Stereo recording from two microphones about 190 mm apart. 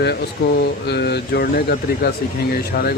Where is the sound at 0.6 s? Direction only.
60° left (ahead or behind).